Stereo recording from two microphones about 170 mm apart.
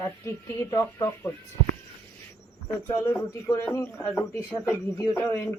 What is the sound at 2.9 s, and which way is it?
Speech, 15° left (ahead or behind).